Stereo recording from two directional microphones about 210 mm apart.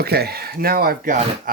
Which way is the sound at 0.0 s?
50° right (ahead or behind).